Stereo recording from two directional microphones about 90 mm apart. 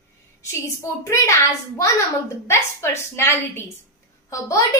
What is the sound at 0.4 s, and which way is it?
A woman's voice, 30° left (ahead or behind).